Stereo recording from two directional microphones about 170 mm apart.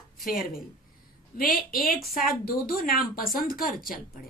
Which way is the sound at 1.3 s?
55° left (ahead or behind).